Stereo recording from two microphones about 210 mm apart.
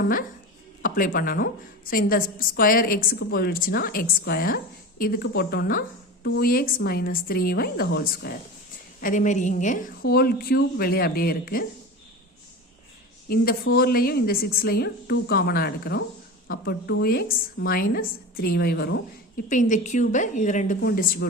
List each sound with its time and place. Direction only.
0.8 s a woman's voice: 40° left (ahead or behind)
9.0 s a woman's voice: 40° left (ahead or behind)
10.1 s a woman's voice: 45° left (ahead or behind)
13.2 s a woman's voice: 45° left (ahead or behind)
19.5 s a woman's voice: 35° left (ahead or behind)